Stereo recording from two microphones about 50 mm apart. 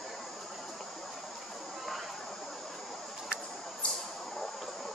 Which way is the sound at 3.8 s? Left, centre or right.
Left.